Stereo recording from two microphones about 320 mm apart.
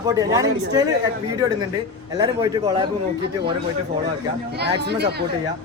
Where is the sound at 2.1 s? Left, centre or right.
Centre.